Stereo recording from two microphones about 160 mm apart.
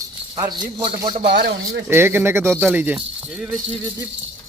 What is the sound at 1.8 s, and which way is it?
Speech, 15° right (ahead or behind).